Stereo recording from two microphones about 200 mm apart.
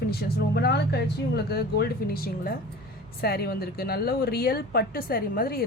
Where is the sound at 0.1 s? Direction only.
50° left (ahead or behind).